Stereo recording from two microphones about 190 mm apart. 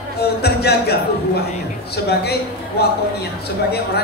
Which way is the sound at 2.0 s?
60° left (ahead or behind).